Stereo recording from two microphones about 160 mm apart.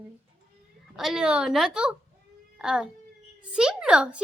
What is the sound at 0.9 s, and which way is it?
A woman's voice, centre (ahead or behind).